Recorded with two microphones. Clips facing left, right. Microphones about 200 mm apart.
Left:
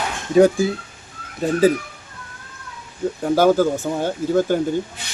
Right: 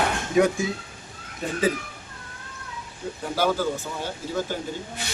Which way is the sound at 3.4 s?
45° left (ahead or behind).